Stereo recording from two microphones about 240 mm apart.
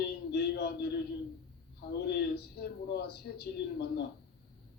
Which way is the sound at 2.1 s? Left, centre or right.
Left.